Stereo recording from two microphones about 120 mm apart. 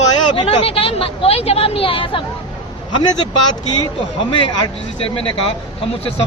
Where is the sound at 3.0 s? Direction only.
35° left (ahead or behind).